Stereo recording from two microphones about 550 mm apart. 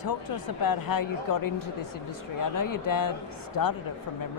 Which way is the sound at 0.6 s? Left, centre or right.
Left.